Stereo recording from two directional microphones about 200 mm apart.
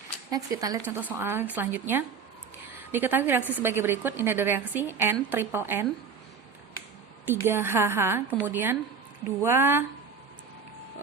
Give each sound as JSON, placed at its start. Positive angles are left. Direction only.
{"t": 0.3, "sound": "a woman's voice", "side_deg": -15}
{"t": 7.3, "sound": "a woman's voice", "side_deg": -10}